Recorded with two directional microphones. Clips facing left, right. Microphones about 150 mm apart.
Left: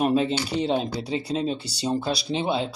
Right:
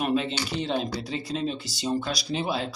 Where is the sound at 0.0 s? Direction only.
35° left (ahead or behind).